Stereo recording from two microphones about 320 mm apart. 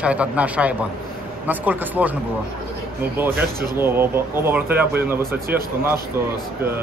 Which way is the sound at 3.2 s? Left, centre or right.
Centre.